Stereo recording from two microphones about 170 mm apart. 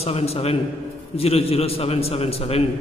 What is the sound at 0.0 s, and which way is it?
A man's voice, 35° left (ahead or behind).